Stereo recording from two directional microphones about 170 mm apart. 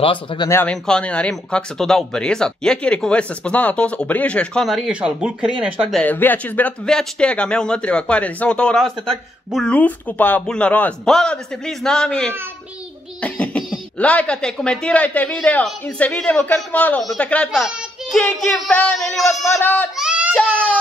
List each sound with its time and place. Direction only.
0.0 s speech: 30° left (ahead or behind)
0.5 s speech: 10° left (ahead or behind)
20.0 s a sound: 5° right (ahead or behind)
20.3 s speech: 5° left (ahead or behind)